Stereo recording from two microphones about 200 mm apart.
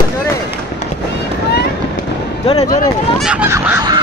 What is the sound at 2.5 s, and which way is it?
Speech, 35° left (ahead or behind).